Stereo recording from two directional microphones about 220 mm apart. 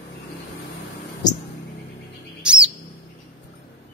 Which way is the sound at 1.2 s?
20° left (ahead or behind).